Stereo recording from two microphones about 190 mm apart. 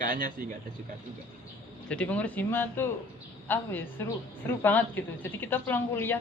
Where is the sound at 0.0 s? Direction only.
45° right (ahead or behind).